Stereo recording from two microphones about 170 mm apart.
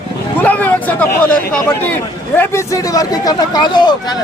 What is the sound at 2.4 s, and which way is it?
Speech, 15° left (ahead or behind).